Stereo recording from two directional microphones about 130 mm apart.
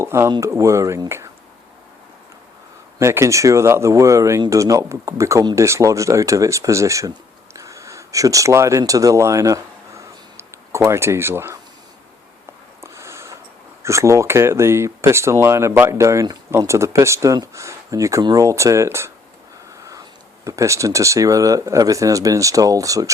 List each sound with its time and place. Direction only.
0.0 s speech: 20° right (ahead or behind)
3.0 s speech: 20° right (ahead or behind)
12.8 s a sound: 20° right (ahead or behind)
13.8 s speech: 20° right (ahead or behind)